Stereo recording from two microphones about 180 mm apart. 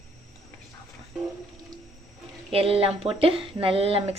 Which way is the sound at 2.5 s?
30° right (ahead or behind).